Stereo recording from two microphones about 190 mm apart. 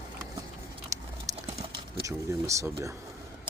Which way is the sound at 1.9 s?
15° right (ahead or behind).